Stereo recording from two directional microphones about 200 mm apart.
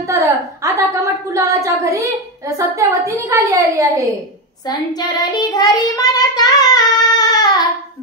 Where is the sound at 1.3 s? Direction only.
15° right (ahead or behind).